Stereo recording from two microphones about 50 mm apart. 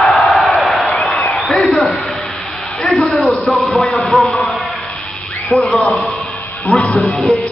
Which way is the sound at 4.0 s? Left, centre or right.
Centre.